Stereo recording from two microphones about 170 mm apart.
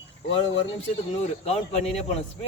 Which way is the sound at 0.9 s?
40° left (ahead or behind).